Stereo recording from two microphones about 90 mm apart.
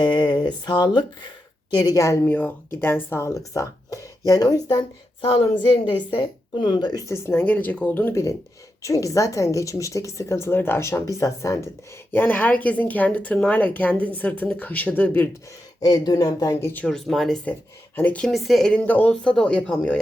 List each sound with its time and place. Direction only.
0.0 s speech: 55° left (ahead or behind); by 2.1 s 40° left (ahead or behind)
2.2 s speech: 20° left (ahead or behind)
3.2 s a woman's voice: 35° left (ahead or behind)
5.2 s speech: 75° left (ahead or behind)
6.1 s speech: 60° left (ahead or behind)
7.0 s a woman's voice: 30° left (ahead or behind)
12.1 s speech: 20° left (ahead or behind)
15.8 s speech: 45° left (ahead or behind)
16.6 s speech: 30° left (ahead or behind)
16.8 s speech: 5° left (ahead or behind)
17.9 s speech: 15° left (ahead or behind)
18.3 s speech: centre (ahead or behind)
18.7 s speech: 15° left (ahead or behind)